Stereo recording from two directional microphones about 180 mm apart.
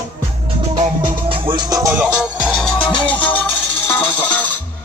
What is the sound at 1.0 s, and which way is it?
Music, 30° right (ahead or behind).